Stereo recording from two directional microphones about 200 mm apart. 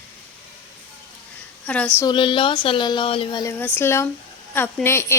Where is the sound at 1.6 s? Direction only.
5° left (ahead or behind).